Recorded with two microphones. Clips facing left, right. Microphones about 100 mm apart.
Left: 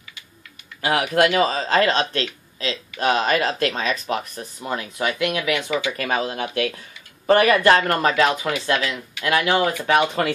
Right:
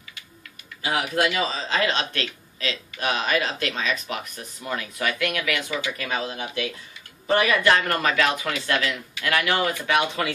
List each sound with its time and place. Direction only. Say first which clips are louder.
0.8 s a man's voice: left 5 dB; 60° left (ahead or behind); by 5.6 s 20° left (ahead or behind)
5.9 s a man's voice: left 5 dB; 50° left (ahead or behind)
8.0 s a man's voice: left 4 dB; 35° left (ahead or behind)
8.5 s a man's voice: left 3 dB; 20° left (ahead or behind); by 10.3 s 45° left (ahead or behind)